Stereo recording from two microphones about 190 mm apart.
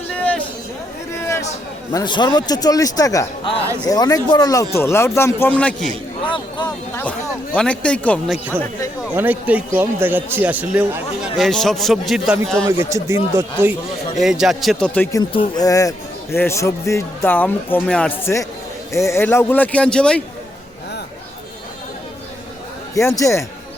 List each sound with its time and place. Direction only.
0.2 s a sound: 5° left (ahead or behind)
1.9 s a man's voice: 20° left (ahead or behind)
6.2 s speech: 25° left (ahead or behind)
7.0 s a man's voice: 5° left (ahead or behind)
9.1 s a man's voice: 10° right (ahead or behind)
12.6 s a man's voice: 15° right (ahead or behind)
14.2 s a man's voice: centre (ahead or behind)
15.2 s a man's voice: 25° left (ahead or behind); by 20.2 s 5° left (ahead or behind)
23.0 s a man's voice: 15° left (ahead or behind)